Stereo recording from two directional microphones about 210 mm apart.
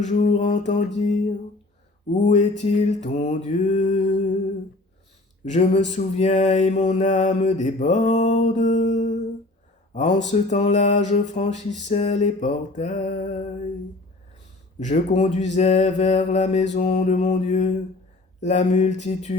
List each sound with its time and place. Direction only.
0.0 s mantra: 35° left (ahead or behind)
5.5 s mantra: 35° left (ahead or behind)
9.9 s speech: 35° left (ahead or behind)
10.2 s mantra: 35° left (ahead or behind)
14.8 s mantra: 35° left (ahead or behind)